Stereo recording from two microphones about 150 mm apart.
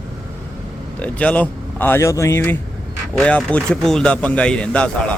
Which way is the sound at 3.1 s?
5° left (ahead or behind).